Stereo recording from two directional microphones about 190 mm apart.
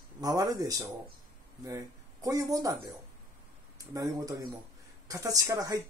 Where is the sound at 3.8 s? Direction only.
15° right (ahead or behind).